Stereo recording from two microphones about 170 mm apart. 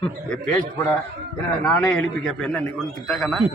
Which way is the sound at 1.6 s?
5° left (ahead or behind).